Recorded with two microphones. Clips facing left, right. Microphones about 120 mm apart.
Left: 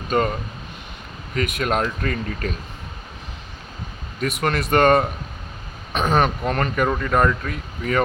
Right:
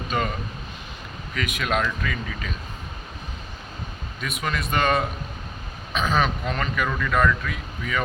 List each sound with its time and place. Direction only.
1.4 s speech: 45° left (ahead or behind)
4.2 s speech: 60° left (ahead or behind)